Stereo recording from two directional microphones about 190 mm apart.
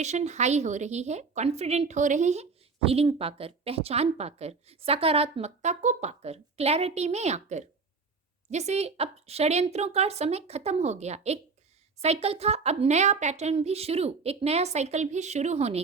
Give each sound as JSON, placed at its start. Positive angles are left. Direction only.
{"t": 0.0, "sound": "a woman's voice", "side_deg": -35}